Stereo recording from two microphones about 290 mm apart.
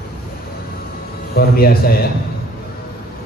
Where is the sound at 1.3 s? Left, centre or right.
Left.